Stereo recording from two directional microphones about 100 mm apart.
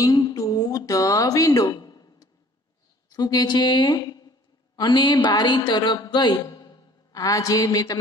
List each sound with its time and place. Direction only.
0.0 s music: 40° left (ahead or behind)
3.1 s a woman's voice: 40° left (ahead or behind)